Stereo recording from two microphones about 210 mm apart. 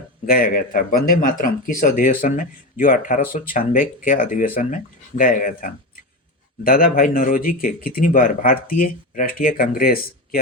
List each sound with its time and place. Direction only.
0.3 s speech: 45° left (ahead or behind)